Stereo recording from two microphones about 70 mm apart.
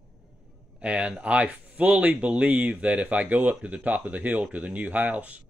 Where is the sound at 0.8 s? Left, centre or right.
Centre.